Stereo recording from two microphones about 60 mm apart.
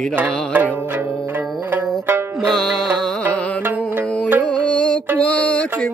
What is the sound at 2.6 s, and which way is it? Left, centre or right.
Music, centre.